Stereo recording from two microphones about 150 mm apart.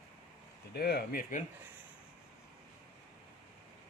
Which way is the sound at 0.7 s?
90° left.